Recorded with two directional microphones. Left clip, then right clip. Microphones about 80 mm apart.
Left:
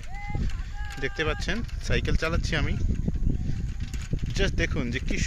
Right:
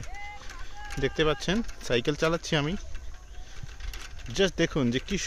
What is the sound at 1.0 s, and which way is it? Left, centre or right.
Speech, right.